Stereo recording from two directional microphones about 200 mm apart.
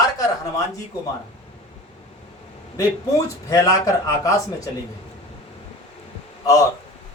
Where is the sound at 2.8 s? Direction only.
15° left (ahead or behind).